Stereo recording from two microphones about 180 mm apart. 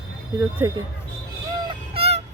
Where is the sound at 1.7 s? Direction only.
35° right (ahead or behind).